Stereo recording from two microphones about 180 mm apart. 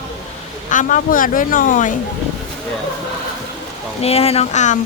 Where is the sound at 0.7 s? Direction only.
45° left (ahead or behind).